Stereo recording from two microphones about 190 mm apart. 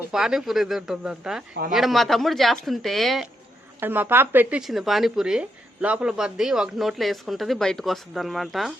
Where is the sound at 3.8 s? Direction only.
10° right (ahead or behind).